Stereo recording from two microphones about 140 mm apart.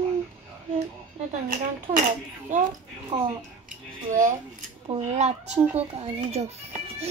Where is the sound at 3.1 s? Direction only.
30° right (ahead or behind).